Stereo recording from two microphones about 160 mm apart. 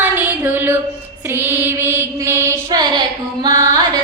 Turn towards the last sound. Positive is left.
turn(degrees=-25)  # may be behind; listen again after turning